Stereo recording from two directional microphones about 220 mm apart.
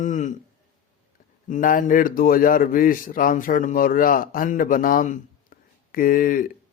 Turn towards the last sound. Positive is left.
turn(degrees=40)  # may be behind; listen again after turning